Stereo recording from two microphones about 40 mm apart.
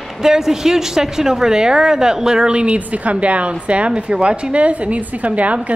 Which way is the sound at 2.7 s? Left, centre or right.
Right.